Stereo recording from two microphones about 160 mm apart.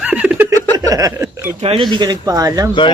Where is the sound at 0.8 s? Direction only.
20° right (ahead or behind).